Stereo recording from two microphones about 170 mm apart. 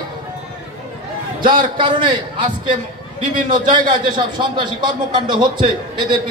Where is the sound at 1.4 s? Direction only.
30° right (ahead or behind).